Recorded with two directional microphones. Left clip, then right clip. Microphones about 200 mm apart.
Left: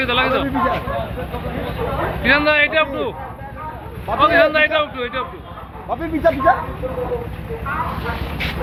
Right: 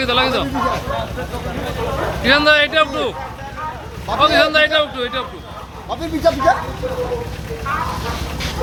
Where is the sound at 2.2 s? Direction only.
50° right (ahead or behind).